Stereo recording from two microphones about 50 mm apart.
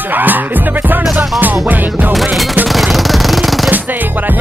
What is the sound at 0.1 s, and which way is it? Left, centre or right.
Speech, right.